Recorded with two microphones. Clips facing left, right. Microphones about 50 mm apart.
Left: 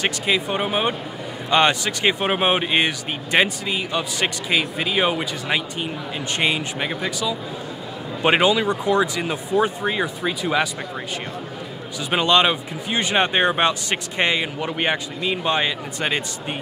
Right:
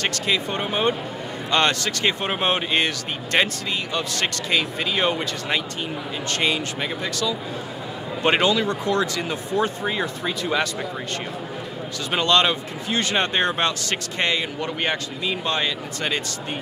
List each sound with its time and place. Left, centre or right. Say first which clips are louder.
0.0 s speech: left 2 dB; centre
12.1 s speech: left 2 dB; centre